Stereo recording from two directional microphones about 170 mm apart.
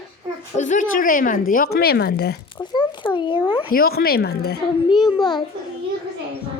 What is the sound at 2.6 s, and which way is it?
Speech, 30° left (ahead or behind).